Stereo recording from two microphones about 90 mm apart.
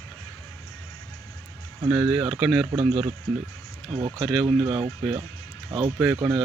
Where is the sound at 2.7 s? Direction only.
90° right.